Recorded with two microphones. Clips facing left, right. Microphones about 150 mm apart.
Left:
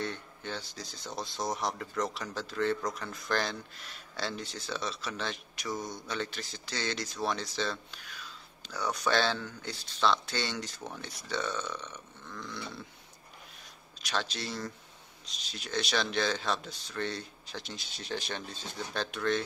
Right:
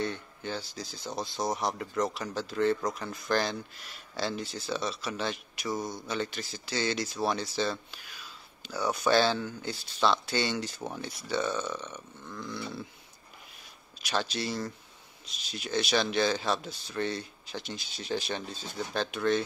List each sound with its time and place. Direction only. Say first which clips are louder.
0.0 s speech: right 3 dB; centre (ahead or behind)
14.0 s speech: right 4 dB; 5° right (ahead or behind)